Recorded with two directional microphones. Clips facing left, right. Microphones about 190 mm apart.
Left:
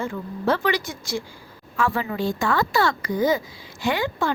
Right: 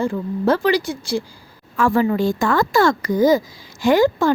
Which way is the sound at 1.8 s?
45° right (ahead or behind).